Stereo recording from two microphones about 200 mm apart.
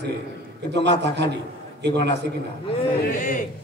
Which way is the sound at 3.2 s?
40° left (ahead or behind).